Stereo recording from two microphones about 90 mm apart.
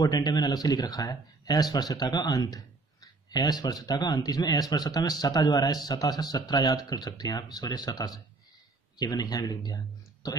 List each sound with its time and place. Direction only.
0.0 s speech: 45° left (ahead or behind)